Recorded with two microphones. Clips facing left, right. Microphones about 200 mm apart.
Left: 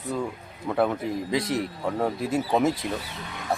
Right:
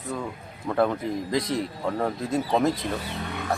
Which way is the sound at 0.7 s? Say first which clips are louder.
Right 1 dB; 5° left (ahead or behind).